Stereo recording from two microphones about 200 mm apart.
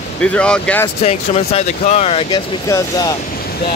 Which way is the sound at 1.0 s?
30° left (ahead or behind).